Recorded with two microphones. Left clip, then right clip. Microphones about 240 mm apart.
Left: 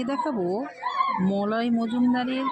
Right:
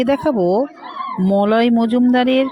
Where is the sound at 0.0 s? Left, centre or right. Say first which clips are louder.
Right 11 dB; right.